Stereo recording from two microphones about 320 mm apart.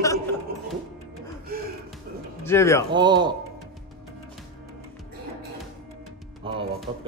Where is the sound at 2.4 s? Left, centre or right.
Centre.